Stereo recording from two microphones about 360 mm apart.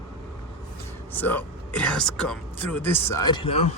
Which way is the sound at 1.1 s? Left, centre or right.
Centre.